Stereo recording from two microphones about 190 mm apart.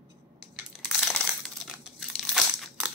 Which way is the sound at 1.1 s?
Centre (ahead or behind).